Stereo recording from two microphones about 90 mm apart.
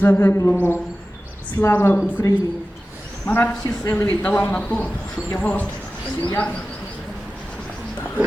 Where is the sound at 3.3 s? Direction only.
20° left (ahead or behind).